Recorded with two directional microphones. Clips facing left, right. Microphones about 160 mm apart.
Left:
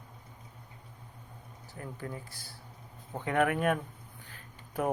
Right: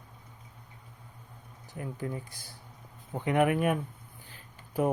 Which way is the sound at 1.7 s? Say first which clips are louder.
Right 5 dB; 20° right (ahead or behind).